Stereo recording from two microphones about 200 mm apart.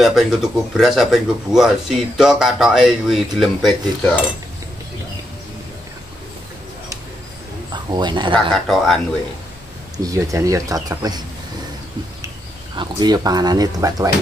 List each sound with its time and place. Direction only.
0.0 s speech: centre (ahead or behind)
7.7 s speech: 20° right (ahead or behind)
8.6 s speech: centre (ahead or behind)
10.0 s speech: 15° right (ahead or behind)
12.7 s speech: 20° right (ahead or behind)